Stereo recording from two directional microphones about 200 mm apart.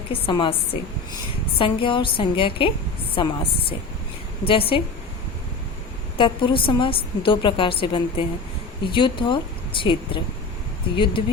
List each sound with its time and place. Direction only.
0.1 s a woman's voice: 25° left (ahead or behind)
6.1 s a woman's voice: 25° left (ahead or behind)